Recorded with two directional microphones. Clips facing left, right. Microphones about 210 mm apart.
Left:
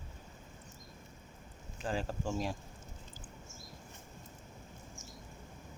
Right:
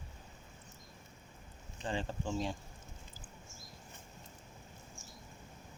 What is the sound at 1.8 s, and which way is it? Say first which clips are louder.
Speech: left 1 dB; 5° left (ahead or behind).